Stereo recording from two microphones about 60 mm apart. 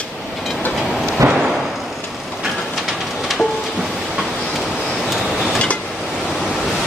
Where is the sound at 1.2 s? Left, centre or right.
Right.